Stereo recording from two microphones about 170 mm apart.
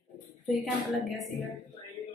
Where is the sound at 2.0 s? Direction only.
20° left (ahead or behind).